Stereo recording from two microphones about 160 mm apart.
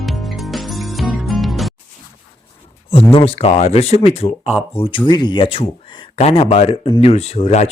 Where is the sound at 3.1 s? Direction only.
35° left (ahead or behind).